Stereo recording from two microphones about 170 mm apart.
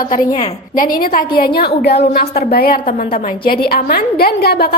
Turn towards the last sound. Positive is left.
turn(degrees=65)  # may be behind; listen again after turning